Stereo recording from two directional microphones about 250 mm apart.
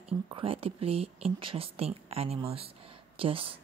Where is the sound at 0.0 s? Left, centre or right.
Right.